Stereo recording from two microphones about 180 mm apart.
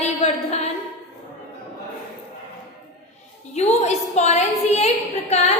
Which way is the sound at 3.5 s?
35° left (ahead or behind).